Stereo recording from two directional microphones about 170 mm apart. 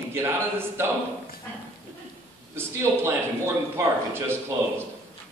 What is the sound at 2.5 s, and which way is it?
A man's voice, 15° right (ahead or behind).